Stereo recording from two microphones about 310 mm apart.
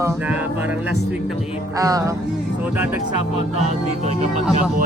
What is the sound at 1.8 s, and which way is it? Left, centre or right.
Music, centre.